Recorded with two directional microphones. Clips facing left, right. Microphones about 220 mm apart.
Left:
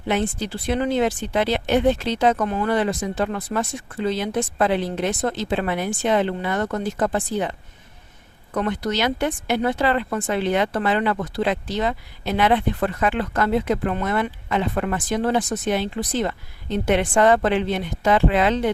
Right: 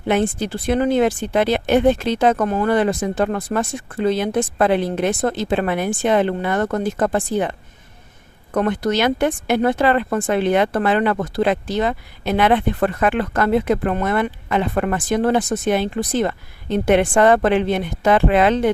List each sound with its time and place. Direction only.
0.1 s speech: 50° right (ahead or behind)
8.5 s speech: 50° right (ahead or behind)